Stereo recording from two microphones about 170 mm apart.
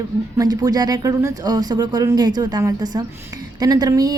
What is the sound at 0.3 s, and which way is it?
A woman's voice, 20° right (ahead or behind).